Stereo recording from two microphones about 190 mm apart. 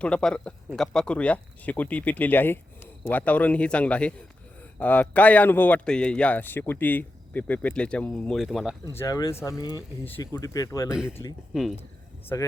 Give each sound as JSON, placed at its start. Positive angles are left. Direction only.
{"t": 0.0, "sound": "a man's voice", "side_deg": 5}
{"t": 8.8, "sound": "a man's voice", "side_deg": 15}
{"t": 10.8, "sound": "speech", "side_deg": -5}